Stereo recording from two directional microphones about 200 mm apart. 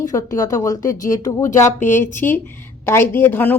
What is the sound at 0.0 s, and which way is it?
A woman's voice, 15° left (ahead or behind).